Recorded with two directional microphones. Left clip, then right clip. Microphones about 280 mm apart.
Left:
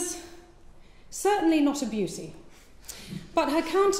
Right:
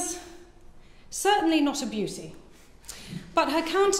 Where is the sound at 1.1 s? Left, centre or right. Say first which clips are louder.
Right 1 dB; centre.